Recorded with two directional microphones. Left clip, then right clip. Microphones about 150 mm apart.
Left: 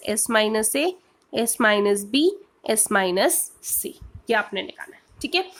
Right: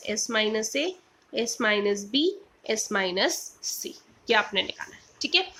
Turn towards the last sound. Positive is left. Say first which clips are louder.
# even
turn(degrees=40)  # may be behind; listen again after turning